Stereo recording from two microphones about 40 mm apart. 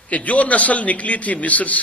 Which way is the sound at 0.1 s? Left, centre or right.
Left.